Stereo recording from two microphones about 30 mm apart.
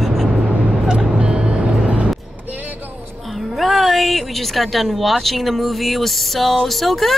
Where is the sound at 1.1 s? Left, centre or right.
Right.